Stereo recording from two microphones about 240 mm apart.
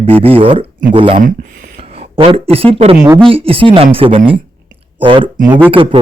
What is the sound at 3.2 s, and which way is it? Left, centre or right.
Speech, right.